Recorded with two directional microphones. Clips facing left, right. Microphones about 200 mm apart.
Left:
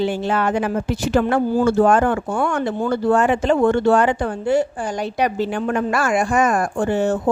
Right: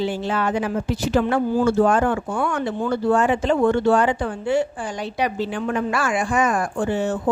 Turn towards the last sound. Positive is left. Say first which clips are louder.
# left 3 dB
turn(degrees=45)  # may be behind; listen again after turning